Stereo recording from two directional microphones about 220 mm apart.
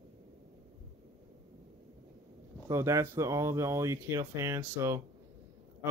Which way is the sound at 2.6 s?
15° right (ahead or behind).